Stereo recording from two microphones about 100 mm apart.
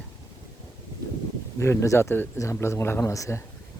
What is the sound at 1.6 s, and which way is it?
Speech, 30° left (ahead or behind).